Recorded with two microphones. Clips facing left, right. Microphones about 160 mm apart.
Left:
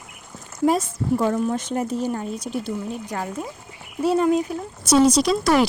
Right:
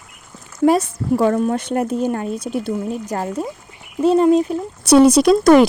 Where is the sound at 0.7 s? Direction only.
70° right (ahead or behind); by 3.3 s 40° right (ahead or behind).